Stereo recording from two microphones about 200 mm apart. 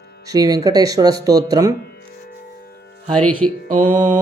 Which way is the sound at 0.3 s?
20° right (ahead or behind).